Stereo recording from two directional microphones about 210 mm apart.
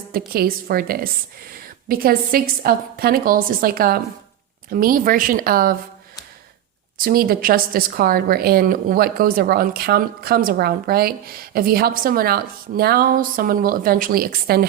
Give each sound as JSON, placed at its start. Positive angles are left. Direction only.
{"t": 0.1, "sound": "a woman's voice", "side_deg": -45}
{"t": 7.0, "sound": "a woman's voice", "side_deg": -45}